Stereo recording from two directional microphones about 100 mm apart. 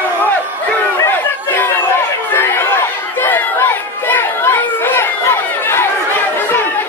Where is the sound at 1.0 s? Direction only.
20° left (ahead or behind).